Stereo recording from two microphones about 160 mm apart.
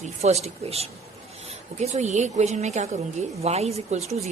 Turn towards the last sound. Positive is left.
turn(degrees=-40)  # may be behind; listen again after turning